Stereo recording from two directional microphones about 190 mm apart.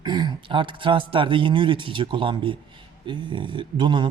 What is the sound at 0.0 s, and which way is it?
Speech, 20° right (ahead or behind).